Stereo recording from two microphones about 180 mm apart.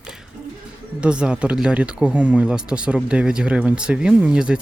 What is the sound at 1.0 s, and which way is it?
Speech, 5° right (ahead or behind).